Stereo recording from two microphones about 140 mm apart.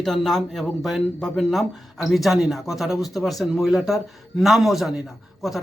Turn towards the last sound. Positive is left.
turn(degrees=0)  # may be behind; listen again after turning